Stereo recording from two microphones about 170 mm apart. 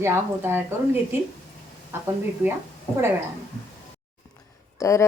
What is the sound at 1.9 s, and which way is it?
Speech, 15° right (ahead or behind).